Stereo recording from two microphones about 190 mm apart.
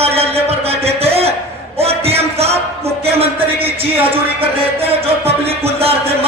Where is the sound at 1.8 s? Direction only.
30° right (ahead or behind).